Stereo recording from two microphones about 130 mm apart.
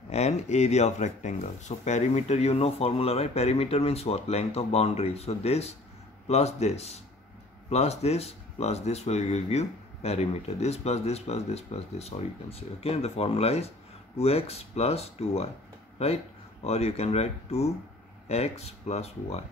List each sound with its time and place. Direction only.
0.1 s speech: 55° left (ahead or behind)
16.6 s speech: 55° left (ahead or behind)